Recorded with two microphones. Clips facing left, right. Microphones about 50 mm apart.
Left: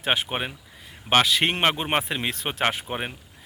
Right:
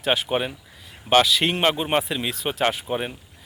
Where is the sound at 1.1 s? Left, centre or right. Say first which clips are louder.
Right 2 dB; left.